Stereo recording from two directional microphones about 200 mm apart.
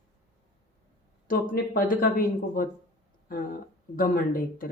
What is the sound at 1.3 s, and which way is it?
Speech, 45° left (ahead or behind).